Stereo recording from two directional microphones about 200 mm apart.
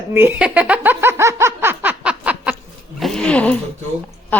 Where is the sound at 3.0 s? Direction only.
Centre (ahead or behind).